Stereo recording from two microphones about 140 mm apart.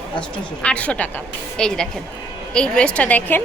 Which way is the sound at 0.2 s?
5° left (ahead or behind).